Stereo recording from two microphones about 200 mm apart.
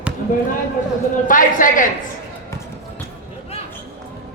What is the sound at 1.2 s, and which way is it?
Speech, 40° left (ahead or behind).